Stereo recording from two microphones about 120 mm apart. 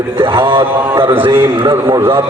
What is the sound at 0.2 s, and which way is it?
Mantra, 45° right (ahead or behind).